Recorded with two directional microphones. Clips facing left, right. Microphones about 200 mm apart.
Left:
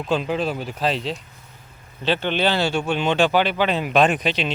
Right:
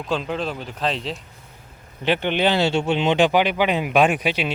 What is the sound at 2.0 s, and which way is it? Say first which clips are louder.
Speech: right 1 dB; 15° right (ahead or behind).